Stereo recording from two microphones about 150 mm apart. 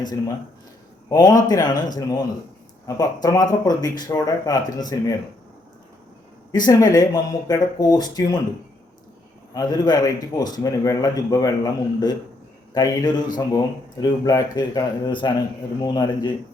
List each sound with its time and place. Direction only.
1.1 s a man's voice: 25° left (ahead or behind)
6.7 s a man's voice: 25° left (ahead or behind)
9.6 s a man's voice: 30° left (ahead or behind)